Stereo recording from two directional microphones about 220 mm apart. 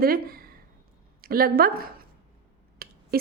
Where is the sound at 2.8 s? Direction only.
45° right (ahead or behind).